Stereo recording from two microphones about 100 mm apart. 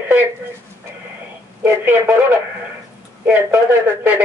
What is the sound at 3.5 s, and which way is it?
Speech, 20° right (ahead or behind).